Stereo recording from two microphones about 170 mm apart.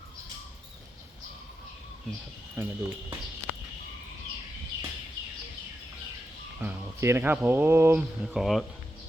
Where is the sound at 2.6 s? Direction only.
15° right (ahead or behind).